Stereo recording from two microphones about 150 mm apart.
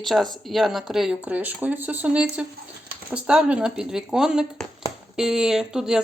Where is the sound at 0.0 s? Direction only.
Centre (ahead or behind).